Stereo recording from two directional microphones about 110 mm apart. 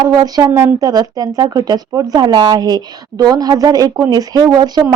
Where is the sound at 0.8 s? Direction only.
35° right (ahead or behind).